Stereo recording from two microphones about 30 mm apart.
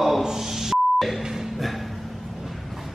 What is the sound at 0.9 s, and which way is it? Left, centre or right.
Beep, centre.